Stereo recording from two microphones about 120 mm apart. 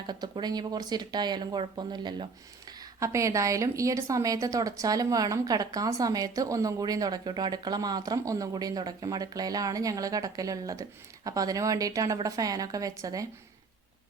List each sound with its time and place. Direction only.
0.1 s speech: 35° right (ahead or behind)
3.0 s a woman's voice: 25° right (ahead or behind)